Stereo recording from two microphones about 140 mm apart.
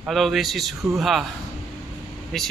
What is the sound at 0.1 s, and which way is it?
Speech, centre (ahead or behind).